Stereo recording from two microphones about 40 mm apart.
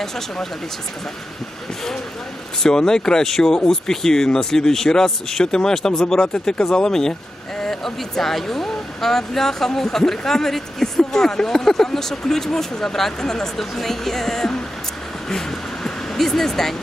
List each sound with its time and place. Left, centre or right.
2.6 s speech: centre